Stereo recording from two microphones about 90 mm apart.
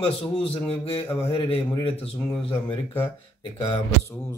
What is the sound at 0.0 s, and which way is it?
A man's voice, 90° left.